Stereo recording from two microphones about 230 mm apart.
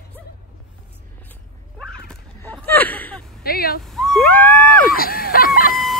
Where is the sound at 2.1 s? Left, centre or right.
Centre.